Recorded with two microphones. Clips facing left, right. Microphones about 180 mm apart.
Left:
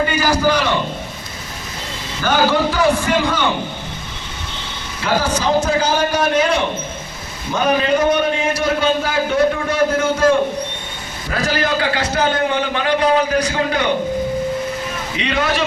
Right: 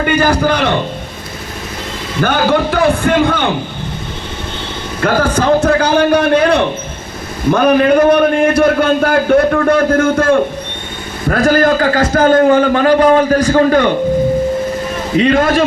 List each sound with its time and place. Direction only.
0.0 s a man's voice: 55° right (ahead or behind)
2.2 s a man's voice: 60° right (ahead or behind)
4.9 s a man's voice: 55° right (ahead or behind)
15.1 s a man's voice: 45° right (ahead or behind)